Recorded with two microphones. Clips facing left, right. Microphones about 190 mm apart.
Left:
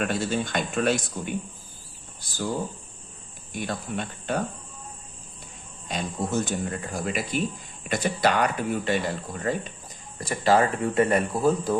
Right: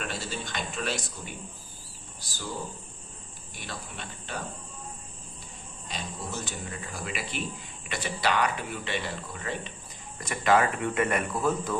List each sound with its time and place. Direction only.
0.0 s speech: 55° left (ahead or behind)
3.5 s speech: 50° left (ahead or behind)
5.9 s speech: 50° left (ahead or behind)
10.2 s speech: 35° left (ahead or behind)